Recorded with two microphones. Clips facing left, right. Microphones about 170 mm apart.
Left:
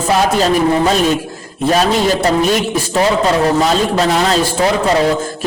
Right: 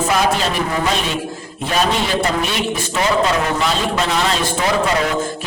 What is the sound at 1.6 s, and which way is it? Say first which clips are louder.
A man's voice: left 6 dB; 40° left (ahead or behind).